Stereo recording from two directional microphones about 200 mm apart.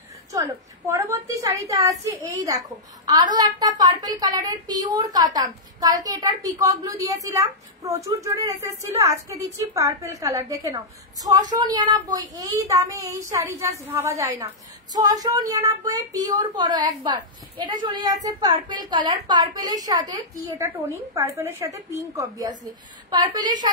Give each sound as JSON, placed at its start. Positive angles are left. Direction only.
{"t": 0.3, "sound": "a woman's voice", "side_deg": -15}